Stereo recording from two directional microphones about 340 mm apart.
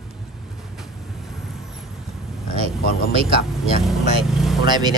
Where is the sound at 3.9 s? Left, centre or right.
Centre.